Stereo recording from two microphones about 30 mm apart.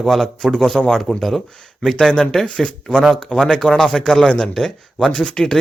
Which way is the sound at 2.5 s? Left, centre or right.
Left.